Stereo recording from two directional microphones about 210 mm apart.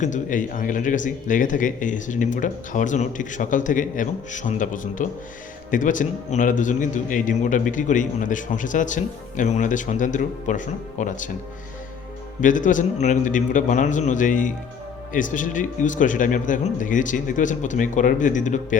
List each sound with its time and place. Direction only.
0.0 s a man's voice: 35° left (ahead or behind)
12.4 s a man's voice: 40° left (ahead or behind)